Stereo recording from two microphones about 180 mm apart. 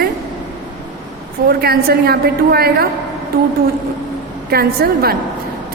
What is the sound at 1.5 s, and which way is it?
A woman's voice, 60° right (ahead or behind).